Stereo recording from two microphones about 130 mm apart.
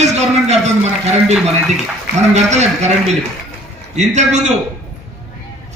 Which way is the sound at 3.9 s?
60° right (ahead or behind).